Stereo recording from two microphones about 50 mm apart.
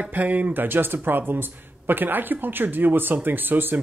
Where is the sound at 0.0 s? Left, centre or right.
Right.